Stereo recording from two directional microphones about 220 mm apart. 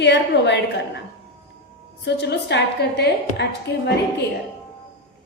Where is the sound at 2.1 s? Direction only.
50° left (ahead or behind).